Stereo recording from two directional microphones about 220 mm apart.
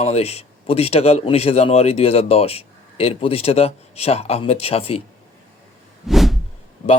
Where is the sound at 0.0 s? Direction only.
30° left (ahead or behind).